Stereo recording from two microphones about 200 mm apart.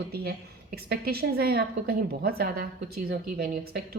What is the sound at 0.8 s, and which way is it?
A woman's voice, 50° right (ahead or behind).